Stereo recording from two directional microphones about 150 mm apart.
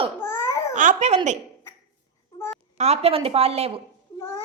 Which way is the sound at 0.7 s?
55° right (ahead or behind).